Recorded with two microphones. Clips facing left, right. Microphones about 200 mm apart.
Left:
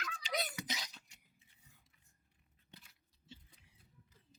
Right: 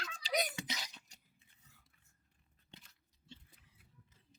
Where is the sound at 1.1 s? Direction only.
40° right (ahead or behind).